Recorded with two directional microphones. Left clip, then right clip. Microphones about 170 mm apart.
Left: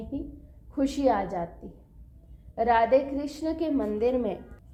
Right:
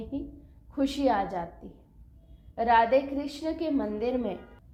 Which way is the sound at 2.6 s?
40° left (ahead or behind).